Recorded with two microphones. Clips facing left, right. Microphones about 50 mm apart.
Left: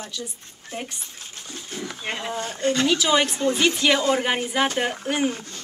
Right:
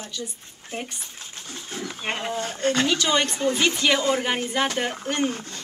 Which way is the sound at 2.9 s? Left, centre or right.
Centre.